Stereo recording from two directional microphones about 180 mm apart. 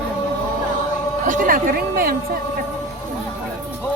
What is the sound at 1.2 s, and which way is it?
Speech, 45° right (ahead or behind).